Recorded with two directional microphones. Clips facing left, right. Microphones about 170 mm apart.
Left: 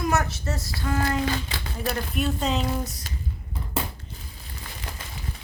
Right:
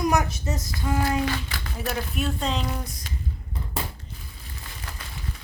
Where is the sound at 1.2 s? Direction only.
25° left (ahead or behind).